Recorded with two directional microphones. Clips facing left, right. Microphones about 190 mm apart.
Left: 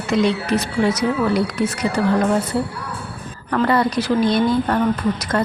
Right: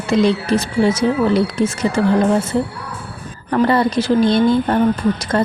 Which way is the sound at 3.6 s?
25° right (ahead or behind).